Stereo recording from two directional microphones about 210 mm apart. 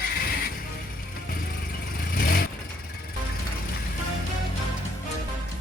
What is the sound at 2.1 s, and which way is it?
Vehicle, 45° left (ahead or behind).